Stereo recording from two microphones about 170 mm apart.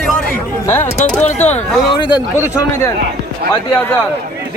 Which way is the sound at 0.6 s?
10° left (ahead or behind).